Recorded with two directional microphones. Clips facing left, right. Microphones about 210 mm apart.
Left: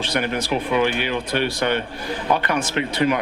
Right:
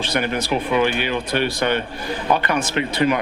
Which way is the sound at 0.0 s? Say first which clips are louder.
Right 1 dB; 10° right (ahead or behind).